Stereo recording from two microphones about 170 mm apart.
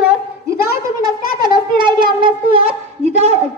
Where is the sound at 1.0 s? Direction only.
25° right (ahead or behind).